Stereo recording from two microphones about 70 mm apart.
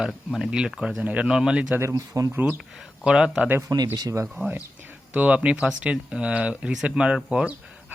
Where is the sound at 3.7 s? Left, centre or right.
Right.